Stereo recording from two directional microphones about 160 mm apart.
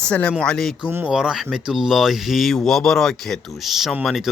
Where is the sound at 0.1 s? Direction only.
5° left (ahead or behind).